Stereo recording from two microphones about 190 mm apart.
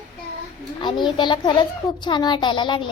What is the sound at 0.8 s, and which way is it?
A child's voice, 25° left (ahead or behind).